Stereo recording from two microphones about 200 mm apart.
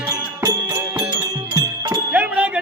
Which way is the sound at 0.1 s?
15° right (ahead or behind).